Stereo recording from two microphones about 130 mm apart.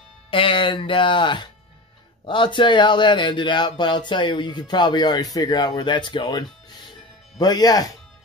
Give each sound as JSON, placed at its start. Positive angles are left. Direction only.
{"t": 0.3, "sound": "speech", "side_deg": 40}